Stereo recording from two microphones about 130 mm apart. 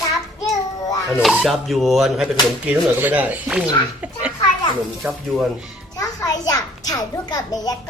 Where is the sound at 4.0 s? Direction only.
10° right (ahead or behind).